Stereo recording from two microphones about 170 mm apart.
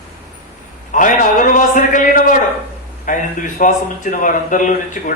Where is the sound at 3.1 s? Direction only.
50° left (ahead or behind).